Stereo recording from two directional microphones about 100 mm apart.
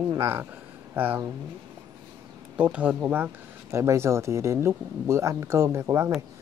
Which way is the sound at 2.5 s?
15° right (ahead or behind).